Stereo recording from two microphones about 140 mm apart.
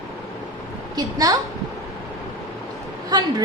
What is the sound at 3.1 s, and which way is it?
Speech, 30° right (ahead or behind).